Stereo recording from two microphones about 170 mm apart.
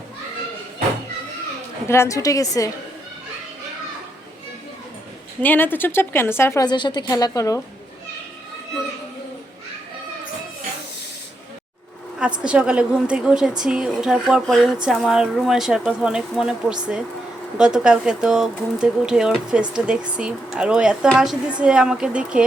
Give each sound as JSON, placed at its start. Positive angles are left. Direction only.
{"t": 1.9, "sound": "a woman's voice", "side_deg": 15}
{"t": 5.4, "sound": "a woman's voice", "side_deg": 10}
{"t": 6.7, "sound": "a woman's voice", "side_deg": 25}
{"t": 12.4, "sound": "a woman's voice", "side_deg": -5}